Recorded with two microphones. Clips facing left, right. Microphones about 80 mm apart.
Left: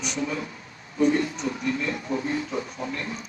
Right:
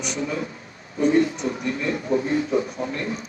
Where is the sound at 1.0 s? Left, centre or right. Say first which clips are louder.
Right 3 dB; right.